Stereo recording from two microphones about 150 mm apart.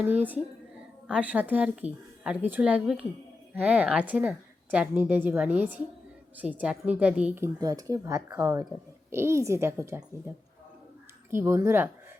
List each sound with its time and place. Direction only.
1.0 s a woman's voice: 5° right (ahead or behind)